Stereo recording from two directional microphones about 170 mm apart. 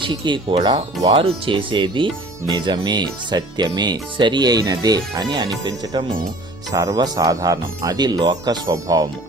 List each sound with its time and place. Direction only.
0.0 s speech: 30° right (ahead or behind)